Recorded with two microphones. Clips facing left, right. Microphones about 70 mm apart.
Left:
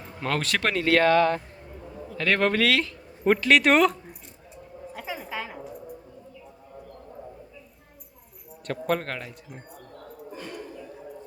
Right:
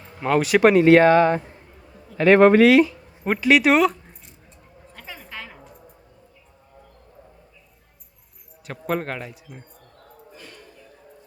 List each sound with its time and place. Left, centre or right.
0.2 s speech: centre
4.9 s a sound: centre
8.6 s speech: centre